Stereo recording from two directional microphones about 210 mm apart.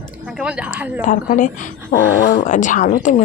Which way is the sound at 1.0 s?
35° left (ahead or behind).